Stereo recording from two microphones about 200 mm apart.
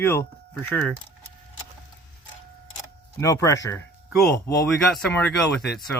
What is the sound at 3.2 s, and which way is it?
Speech, 15° left (ahead or behind).